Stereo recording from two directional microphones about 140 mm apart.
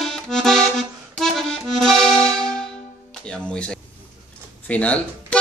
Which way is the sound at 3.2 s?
5° left (ahead or behind).